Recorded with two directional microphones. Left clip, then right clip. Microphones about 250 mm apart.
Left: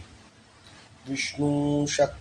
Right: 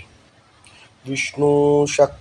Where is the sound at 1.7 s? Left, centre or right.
Right.